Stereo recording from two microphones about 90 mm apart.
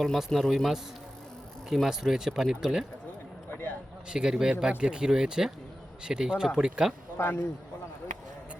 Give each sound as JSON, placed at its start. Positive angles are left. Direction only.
{"t": 0.0, "sound": "speech", "side_deg": 0}
{"t": 3.5, "sound": "a sound", "side_deg": 25}
{"t": 4.1, "sound": "speech", "side_deg": -10}
{"t": 7.2, "sound": "a man's voice", "side_deg": 25}